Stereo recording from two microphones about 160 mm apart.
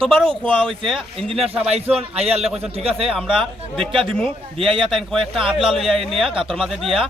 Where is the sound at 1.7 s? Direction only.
40° right (ahead or behind).